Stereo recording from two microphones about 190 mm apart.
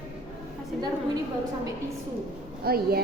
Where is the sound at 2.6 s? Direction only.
55° right (ahead or behind).